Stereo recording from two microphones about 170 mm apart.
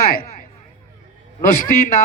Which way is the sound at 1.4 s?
55° left (ahead or behind).